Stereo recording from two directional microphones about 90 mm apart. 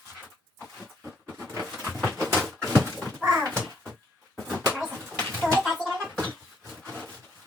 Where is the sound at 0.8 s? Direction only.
5° right (ahead or behind).